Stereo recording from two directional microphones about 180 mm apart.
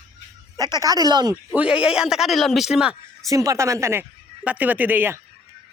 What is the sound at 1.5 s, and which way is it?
A man's voice, 5° right (ahead or behind).